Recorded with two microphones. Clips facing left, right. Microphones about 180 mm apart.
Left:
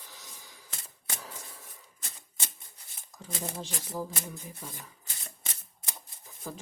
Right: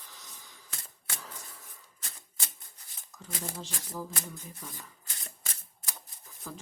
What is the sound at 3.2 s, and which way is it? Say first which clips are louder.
Speech: left 2 dB; 20° left (ahead or behind).